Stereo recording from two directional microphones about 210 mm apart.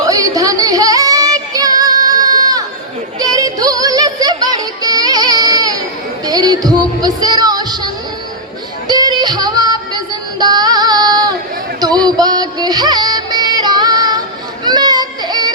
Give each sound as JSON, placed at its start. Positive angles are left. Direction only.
{"t": 0.0, "sound": "child singing", "side_deg": -15}
{"t": 3.2, "sound": "music", "side_deg": -15}
{"t": 8.9, "sound": "music", "side_deg": -20}
{"t": 10.4, "sound": "female singing", "side_deg": -20}
{"t": 12.0, "sound": "music", "side_deg": -20}
{"t": 14.6, "sound": "baby cry", "side_deg": -20}